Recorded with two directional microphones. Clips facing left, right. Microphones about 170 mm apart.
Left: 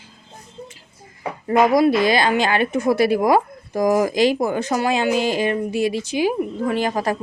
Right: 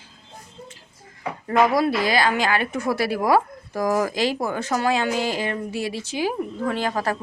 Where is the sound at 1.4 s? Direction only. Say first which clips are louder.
Left 4 dB; 15° left (ahead or behind).